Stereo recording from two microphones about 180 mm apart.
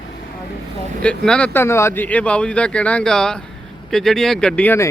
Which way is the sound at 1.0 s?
5° left (ahead or behind).